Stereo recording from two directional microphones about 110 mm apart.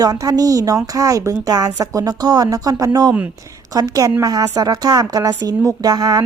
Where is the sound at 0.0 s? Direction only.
35° right (ahead or behind).